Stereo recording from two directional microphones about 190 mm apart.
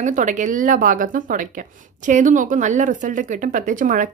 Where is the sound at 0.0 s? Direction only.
40° right (ahead or behind).